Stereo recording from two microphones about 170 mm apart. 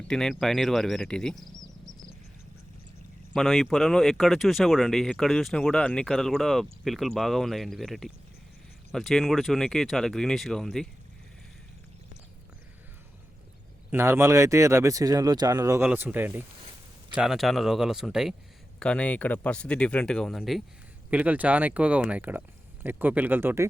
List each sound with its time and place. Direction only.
0.1 s speech: 5° left (ahead or behind)
3.3 s speech: centre (ahead or behind)
13.9 s speech: 15° right (ahead or behind)
15.8 s speech: 10° right (ahead or behind)